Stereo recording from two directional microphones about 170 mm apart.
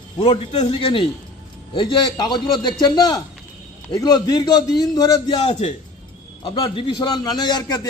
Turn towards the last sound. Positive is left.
turn(degrees=25)  # may be behind; listen again after turning